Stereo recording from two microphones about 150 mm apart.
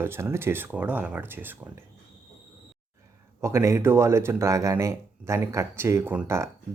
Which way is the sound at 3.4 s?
20° right (ahead or behind).